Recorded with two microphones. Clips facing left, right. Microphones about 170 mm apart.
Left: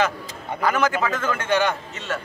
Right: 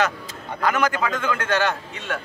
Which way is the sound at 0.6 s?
10° left (ahead or behind).